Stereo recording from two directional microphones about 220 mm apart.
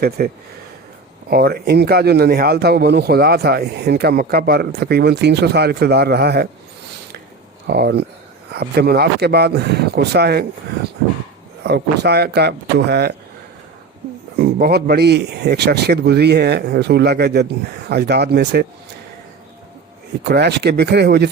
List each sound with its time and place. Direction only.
0.2 s speech: 40° right (ahead or behind)
7.7 s speech: 45° right (ahead or behind)
11.6 s speech: 50° right (ahead or behind)
14.3 s speech: 45° right (ahead or behind)
20.2 s speech: 50° right (ahead or behind)